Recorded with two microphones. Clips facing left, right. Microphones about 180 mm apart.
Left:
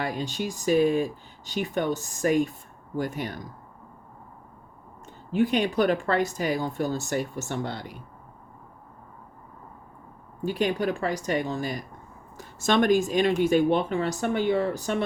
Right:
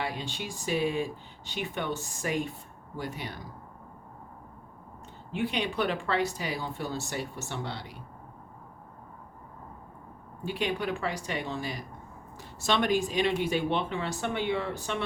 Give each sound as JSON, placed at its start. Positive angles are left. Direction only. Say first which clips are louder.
{"t": 0.0, "sound": "speech", "louder": "left 5 dB", "side_deg": 45}
{"t": 5.3, "sound": "speech", "louder": "left 7 dB", "side_deg": 45}
{"t": 10.4, "sound": "speech", "louder": "left 5 dB", "side_deg": 45}